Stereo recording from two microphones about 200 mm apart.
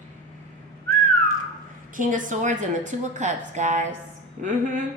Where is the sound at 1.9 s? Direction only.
40° right (ahead or behind).